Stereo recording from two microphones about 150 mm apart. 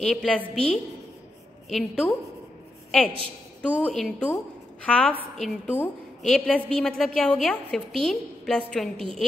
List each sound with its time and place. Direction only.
0.0 s a woman's voice: 5° left (ahead or behind)
1.7 s a woman's voice: centre (ahead or behind)